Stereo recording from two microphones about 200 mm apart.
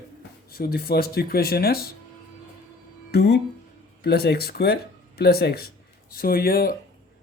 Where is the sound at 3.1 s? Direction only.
60° left (ahead or behind).